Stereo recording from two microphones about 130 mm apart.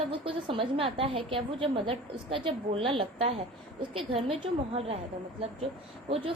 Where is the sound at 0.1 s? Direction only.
40° right (ahead or behind).